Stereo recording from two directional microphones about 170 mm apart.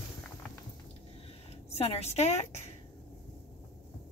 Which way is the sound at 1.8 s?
35° left (ahead or behind).